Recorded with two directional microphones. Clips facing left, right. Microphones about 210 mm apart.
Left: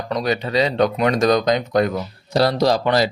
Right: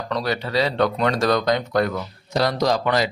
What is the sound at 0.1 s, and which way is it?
Speech, 20° left (ahead or behind).